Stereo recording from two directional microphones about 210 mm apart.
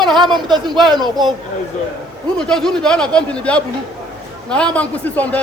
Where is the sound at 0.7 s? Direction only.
20° right (ahead or behind).